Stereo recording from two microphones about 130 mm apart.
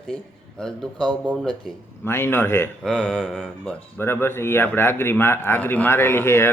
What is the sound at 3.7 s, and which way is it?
A man's voice, 10° left (ahead or behind).